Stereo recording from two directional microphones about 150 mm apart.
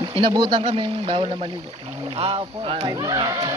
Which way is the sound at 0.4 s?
40° right (ahead or behind).